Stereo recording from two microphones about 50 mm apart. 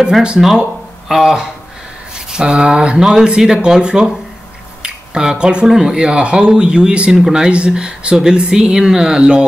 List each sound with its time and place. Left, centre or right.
1.0 s speech: centre
7.1 s speech: centre